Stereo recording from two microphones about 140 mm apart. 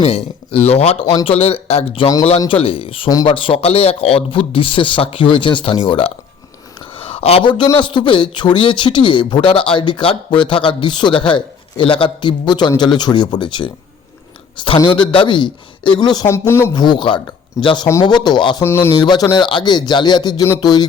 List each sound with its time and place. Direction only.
0.0 s speech: 50° left (ahead or behind); by 16.2 s 30° left (ahead or behind)
16.2 s speech: 20° left (ahead or behind)
16.7 s speech: 30° left (ahead or behind)
18.6 s speech: 15° left (ahead or behind)
19.0 s speech: 30° left (ahead or behind)